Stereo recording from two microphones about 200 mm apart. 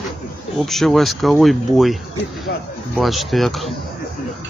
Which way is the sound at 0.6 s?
Centre (ahead or behind).